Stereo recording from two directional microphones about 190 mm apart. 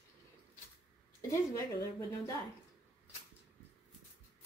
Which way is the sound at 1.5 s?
15° left (ahead or behind).